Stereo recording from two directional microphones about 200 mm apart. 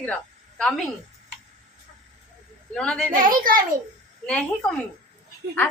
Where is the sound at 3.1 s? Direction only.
45° right (ahead or behind).